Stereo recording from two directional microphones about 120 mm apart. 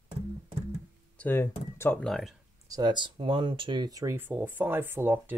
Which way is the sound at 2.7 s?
35° right (ahead or behind).